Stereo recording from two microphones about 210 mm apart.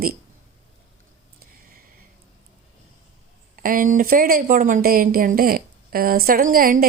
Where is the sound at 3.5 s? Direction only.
40° right (ahead or behind).